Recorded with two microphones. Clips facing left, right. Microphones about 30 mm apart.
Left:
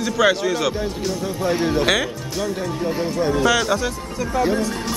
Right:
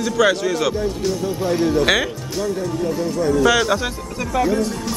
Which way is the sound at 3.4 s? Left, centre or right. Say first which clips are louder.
Right 2 dB; centre.